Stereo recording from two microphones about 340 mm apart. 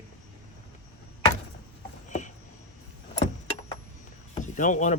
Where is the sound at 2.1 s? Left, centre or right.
Left.